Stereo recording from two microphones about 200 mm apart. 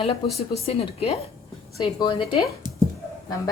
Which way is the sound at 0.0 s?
30° left (ahead or behind).